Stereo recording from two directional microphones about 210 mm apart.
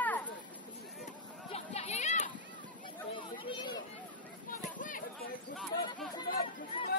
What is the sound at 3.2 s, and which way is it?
Chatter, 25° left (ahead or behind).